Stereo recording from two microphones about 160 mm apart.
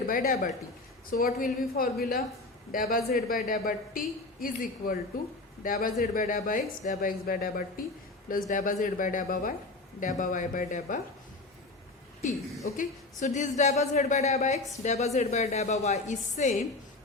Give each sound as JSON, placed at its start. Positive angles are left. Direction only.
{"t": 0.1, "sound": "a woman's voice", "side_deg": 60}
{"t": 12.6, "sound": "speech", "side_deg": 55}